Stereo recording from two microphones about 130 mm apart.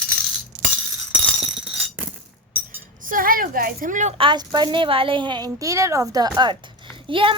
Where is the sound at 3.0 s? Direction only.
90° right.